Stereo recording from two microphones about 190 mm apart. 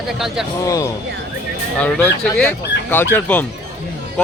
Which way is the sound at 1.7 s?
5° left (ahead or behind).